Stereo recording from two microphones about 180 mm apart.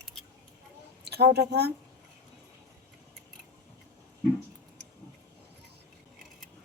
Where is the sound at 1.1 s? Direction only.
65° right (ahead or behind).